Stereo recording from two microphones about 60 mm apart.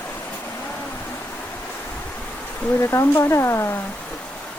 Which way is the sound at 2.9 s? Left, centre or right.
Left.